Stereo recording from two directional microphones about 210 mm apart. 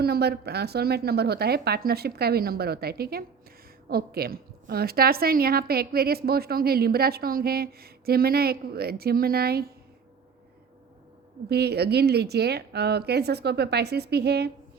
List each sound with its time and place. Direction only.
0.0 s a woman's voice: 50° right (ahead or behind)
11.4 s a woman's voice: 50° right (ahead or behind)